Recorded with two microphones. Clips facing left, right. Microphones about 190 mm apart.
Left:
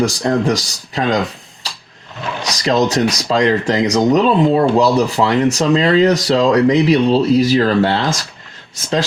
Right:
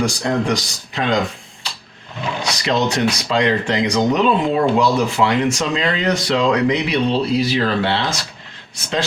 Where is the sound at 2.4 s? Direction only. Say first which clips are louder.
Left 4 dB; 40° left (ahead or behind).